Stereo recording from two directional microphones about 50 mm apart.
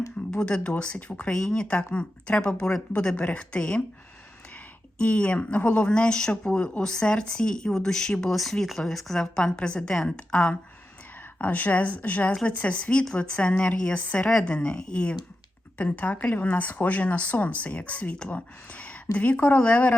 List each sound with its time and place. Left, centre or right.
0.3 s speech: centre
1.3 s speech: centre
3.2 s speech: left
15.8 s speech: left